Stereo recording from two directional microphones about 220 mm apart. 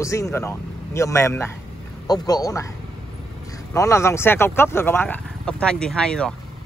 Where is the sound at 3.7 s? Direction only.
15° left (ahead or behind).